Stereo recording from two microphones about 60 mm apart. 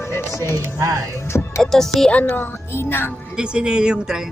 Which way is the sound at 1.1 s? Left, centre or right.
Left.